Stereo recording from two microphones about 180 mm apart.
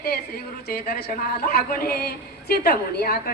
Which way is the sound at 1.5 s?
55° left (ahead or behind).